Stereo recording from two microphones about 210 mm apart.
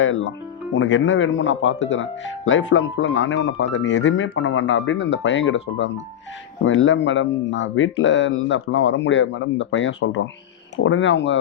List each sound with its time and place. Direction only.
0.0 s speech: 65° left (ahead or behind)